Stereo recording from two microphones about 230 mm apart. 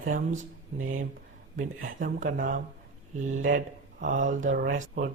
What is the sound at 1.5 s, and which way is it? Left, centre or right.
Speech, right.